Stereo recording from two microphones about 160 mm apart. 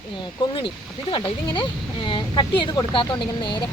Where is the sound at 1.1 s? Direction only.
30° left (ahead or behind).